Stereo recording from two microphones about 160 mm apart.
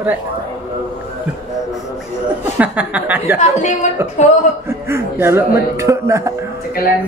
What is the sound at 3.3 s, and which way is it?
Speech, 50° left (ahead or behind).